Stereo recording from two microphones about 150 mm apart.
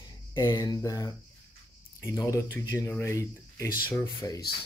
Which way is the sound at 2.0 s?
20° left (ahead or behind).